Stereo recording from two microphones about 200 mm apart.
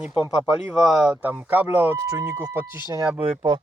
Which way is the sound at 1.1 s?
10° right (ahead or behind).